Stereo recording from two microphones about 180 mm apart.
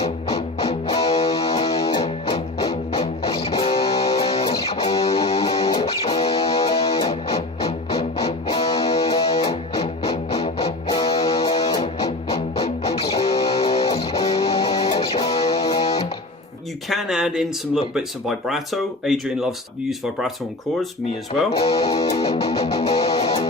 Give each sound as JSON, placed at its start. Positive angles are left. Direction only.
{"t": 0.0, "sound": "music", "side_deg": 35}
{"t": 13.8, "sound": "music", "side_deg": 25}
{"t": 14.1, "sound": "music", "side_deg": 35}
{"t": 16.9, "sound": "speech", "side_deg": 0}
{"t": 21.6, "sound": "music", "side_deg": 35}
{"t": 22.0, "sound": "music", "side_deg": 25}
{"t": 22.3, "sound": "music", "side_deg": 35}